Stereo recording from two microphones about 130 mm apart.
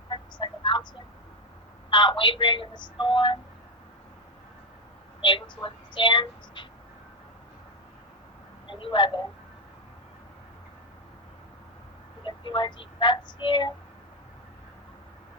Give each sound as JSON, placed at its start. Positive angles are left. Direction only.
{"t": 0.1, "sound": "a sound", "side_deg": 35}
{"t": 1.9, "sound": "a woman's voice", "side_deg": 35}
{"t": 5.2, "sound": "a woman's voice", "side_deg": 40}
{"t": 8.6, "sound": "a woman's voice", "side_deg": 40}
{"t": 12.2, "sound": "speech", "side_deg": 35}